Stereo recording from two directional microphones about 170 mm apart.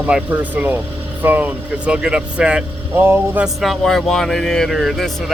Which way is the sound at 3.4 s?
Centre (ahead or behind).